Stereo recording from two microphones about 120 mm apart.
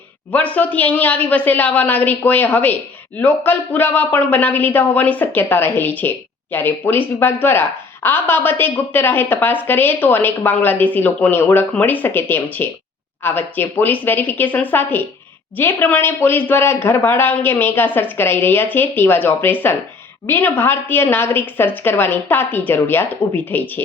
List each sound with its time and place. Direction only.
0.3 s a man's voice: 10° left (ahead or behind)